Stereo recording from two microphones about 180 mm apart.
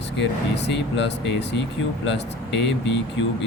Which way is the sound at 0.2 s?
80° left.